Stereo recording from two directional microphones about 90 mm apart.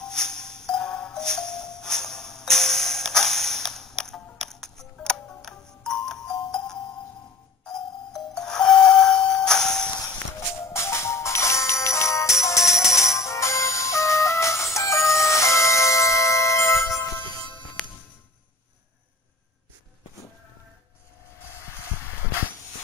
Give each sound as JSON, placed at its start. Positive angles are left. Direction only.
{"t": 0.0, "sound": "music", "side_deg": 5}
{"t": 8.1, "sound": "music", "side_deg": 5}
{"t": 10.7, "sound": "jingle bell", "side_deg": 30}
{"t": 12.4, "sound": "music", "side_deg": 35}